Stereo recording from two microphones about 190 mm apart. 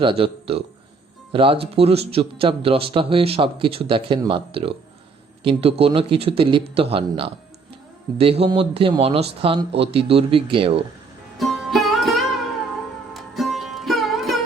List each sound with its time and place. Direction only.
0.0 s speech: 30° right (ahead or behind)
11.3 s music: centre (ahead or behind)